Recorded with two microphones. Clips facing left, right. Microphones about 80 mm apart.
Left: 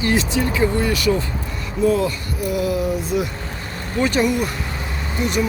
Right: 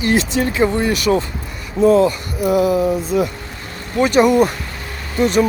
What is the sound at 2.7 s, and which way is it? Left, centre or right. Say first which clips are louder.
Speech: right 4 dB; right.